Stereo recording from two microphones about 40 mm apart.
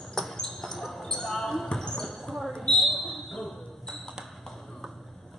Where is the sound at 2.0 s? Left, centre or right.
Centre.